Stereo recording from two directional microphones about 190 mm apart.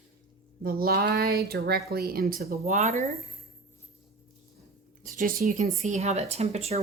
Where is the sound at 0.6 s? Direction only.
50° right (ahead or behind).